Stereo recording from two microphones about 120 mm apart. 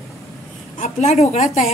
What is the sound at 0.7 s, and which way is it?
Speech, 70° left (ahead or behind).